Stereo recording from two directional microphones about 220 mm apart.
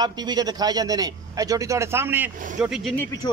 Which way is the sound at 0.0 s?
20° right (ahead or behind).